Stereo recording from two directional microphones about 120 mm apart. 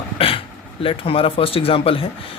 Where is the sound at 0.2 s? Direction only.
50° left (ahead or behind).